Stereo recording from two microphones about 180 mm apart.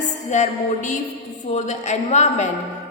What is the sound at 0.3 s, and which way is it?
A woman's voice, 40° left (ahead or behind).